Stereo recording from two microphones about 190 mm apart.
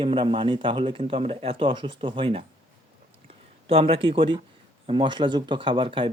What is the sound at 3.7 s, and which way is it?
Speech, 30° right (ahead or behind).